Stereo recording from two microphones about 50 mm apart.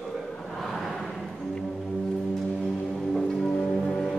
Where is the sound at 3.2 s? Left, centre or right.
Centre.